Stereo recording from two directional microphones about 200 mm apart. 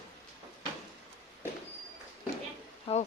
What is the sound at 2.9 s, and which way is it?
Speech, 25° left (ahead or behind).